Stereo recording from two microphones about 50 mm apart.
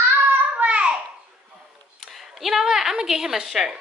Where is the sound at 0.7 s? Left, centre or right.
Centre.